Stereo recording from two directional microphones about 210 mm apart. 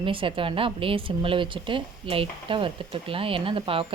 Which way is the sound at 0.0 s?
25° right (ahead or behind).